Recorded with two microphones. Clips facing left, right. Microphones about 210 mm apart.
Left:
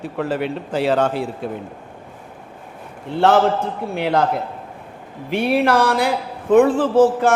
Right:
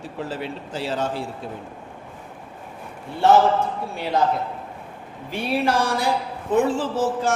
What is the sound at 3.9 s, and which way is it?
Speech, 65° left (ahead or behind).